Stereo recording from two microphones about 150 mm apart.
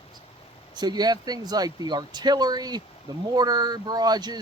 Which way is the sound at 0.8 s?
30° right (ahead or behind).